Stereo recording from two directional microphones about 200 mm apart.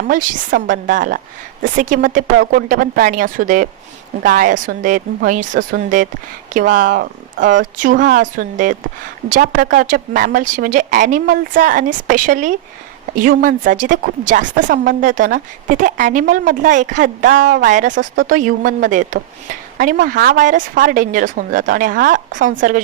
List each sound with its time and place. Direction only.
0.1 s a woman's voice: 40° right (ahead or behind)